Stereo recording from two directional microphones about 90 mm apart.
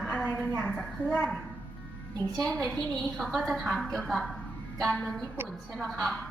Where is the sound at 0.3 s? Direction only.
20° right (ahead or behind).